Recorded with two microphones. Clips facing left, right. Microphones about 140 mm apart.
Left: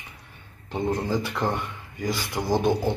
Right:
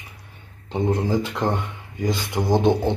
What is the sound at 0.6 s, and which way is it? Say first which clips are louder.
Speech: right 4 dB; 20° right (ahead or behind).